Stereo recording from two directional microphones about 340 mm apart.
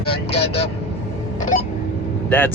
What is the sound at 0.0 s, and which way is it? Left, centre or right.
Speech, centre.